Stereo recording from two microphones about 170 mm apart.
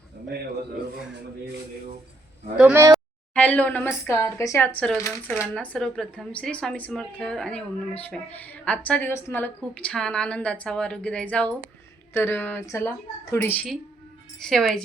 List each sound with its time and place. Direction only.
2.6 s speech: 5° right (ahead or behind)
2.9 s a woman's voice: 10° left (ahead or behind)
5.5 s a woman's voice: 5° left (ahead or behind)